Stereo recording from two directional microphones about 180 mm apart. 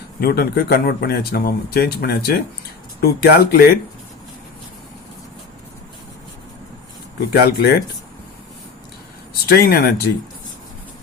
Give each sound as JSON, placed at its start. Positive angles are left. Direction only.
{"t": 0.2, "sound": "speech", "side_deg": 60}
{"t": 7.3, "sound": "speech", "side_deg": 60}
{"t": 9.5, "sound": "speech", "side_deg": 55}